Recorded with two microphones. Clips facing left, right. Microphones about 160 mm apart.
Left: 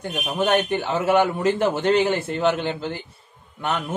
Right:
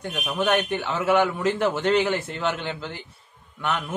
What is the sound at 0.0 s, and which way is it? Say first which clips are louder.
A man's voice: left 2 dB; 30° left (ahead or behind).